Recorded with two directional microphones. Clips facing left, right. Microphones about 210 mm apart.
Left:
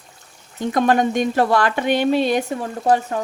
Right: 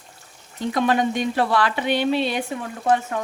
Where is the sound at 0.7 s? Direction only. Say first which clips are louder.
Left 3 dB; 45° left (ahead or behind).